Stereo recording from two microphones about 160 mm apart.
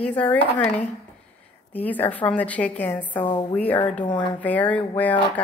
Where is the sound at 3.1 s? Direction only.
25° left (ahead or behind).